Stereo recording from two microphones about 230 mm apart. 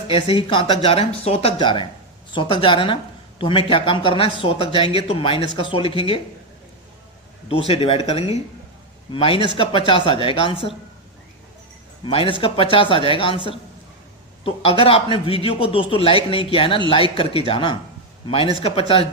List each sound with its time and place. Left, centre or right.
0.1 s a woman's voice: left
7.4 s a woman's voice: left
12.0 s a woman's voice: left